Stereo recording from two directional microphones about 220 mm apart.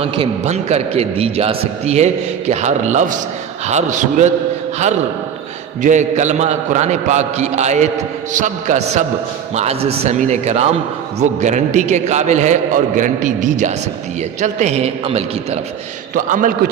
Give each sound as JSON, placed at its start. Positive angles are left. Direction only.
{"t": 0.0, "sound": "a man's voice", "side_deg": -30}
{"t": 5.8, "sound": "a man's voice", "side_deg": -35}